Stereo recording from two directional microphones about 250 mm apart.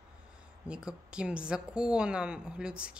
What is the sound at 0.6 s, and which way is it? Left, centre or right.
A woman's voice, centre.